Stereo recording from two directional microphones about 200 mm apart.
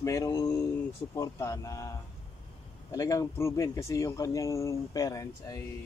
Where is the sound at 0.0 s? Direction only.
15° left (ahead or behind).